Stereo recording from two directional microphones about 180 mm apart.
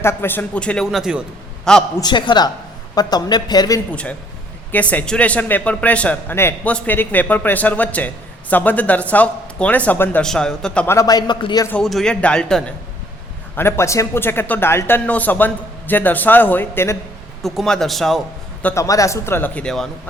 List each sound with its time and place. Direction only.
0.0 s a man's voice: 15° left (ahead or behind); by 1.2 s 5° right (ahead or behind)
2.0 s speech: 25° left (ahead or behind)
4.7 s a man's voice: 10° left (ahead or behind)
10.9 s speech: 20° left (ahead or behind)
11.7 s a man's voice: centre (ahead or behind)
17.4 s a man's voice: centre (ahead or behind)
18.6 s a man's voice: 15° left (ahead or behind)